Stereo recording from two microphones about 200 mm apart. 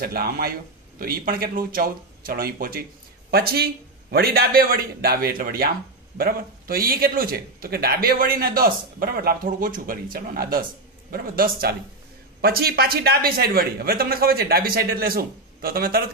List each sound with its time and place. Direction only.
0.0 s a man's voice: 50° right (ahead or behind)